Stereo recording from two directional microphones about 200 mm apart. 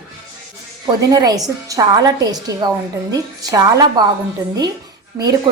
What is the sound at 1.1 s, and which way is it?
A woman's voice, 15° right (ahead or behind).